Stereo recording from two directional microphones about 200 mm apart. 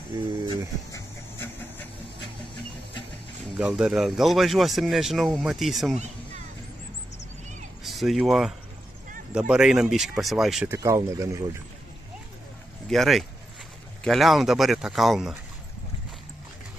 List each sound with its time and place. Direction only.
0.9 s a sound: 10° left (ahead or behind)
3.5 s speech: 5° right (ahead or behind)
5.9 s a sound: 35° right (ahead or behind)
7.8 s speech: centre (ahead or behind)
10.8 s speech: 15° right (ahead or behind)
12.8 s speech: centre (ahead or behind)